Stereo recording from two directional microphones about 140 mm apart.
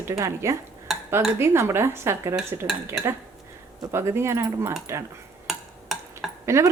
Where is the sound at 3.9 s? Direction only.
20° right (ahead or behind).